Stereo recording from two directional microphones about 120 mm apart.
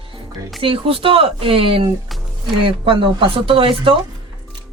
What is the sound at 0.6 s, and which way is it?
Speech, 50° right (ahead or behind).